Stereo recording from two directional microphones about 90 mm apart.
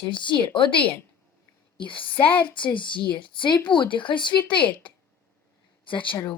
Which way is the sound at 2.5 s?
65° left (ahead or behind).